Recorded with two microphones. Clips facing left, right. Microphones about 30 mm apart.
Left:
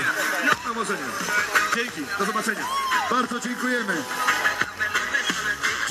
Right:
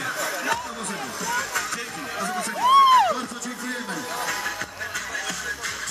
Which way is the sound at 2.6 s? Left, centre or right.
Right.